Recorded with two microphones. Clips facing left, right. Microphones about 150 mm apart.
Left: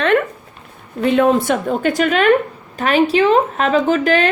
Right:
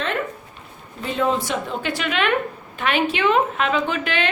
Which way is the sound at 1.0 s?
65° left (ahead or behind).